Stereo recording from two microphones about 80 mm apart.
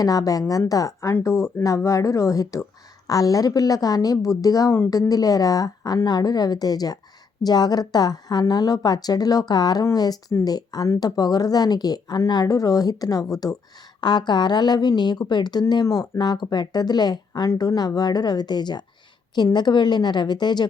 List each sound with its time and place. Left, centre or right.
0.0 s a woman's voice: left
14.0 s a woman's voice: left
15.7 s a woman's voice: left